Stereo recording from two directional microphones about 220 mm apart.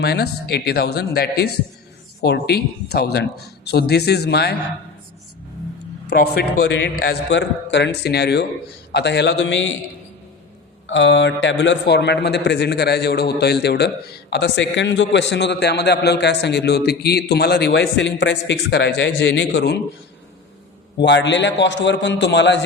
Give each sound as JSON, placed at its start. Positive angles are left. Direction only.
{"t": 0.0, "sound": "a man's voice", "side_deg": 45}
{"t": 6.1, "sound": "a man's voice", "side_deg": 45}
{"t": 10.8, "sound": "a man's voice", "side_deg": 55}
{"t": 21.0, "sound": "a man's voice", "side_deg": 55}